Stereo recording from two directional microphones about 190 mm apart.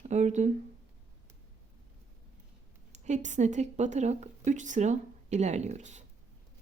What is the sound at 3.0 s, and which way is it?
Speech, 40° right (ahead or behind).